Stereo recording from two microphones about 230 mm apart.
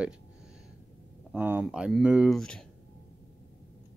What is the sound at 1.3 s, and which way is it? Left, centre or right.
Speech, centre.